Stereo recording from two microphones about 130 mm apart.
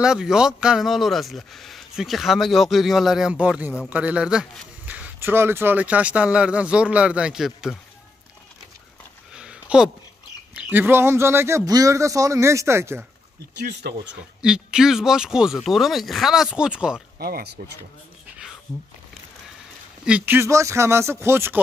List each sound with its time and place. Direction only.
0.0 s speech: 5° right (ahead or behind)
9.3 s a sound: 5° right (ahead or behind)
10.5 s a man's voice: 15° right (ahead or behind)
14.4 s speech: 5° right (ahead or behind)
17.6 s speech: 90° right
20.1 s a man's voice: 15° right (ahead or behind)